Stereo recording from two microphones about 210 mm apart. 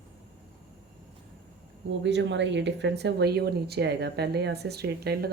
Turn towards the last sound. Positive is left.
turn(degrees=-50)  # may be behind; listen again after turning